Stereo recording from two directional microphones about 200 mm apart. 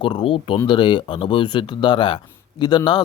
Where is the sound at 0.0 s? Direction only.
25° left (ahead or behind).